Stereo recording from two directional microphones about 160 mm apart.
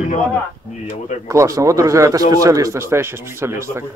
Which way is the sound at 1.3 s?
20° right (ahead or behind).